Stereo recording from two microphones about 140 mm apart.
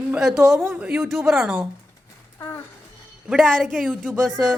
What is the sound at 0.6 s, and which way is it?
Speech, 15° right (ahead or behind).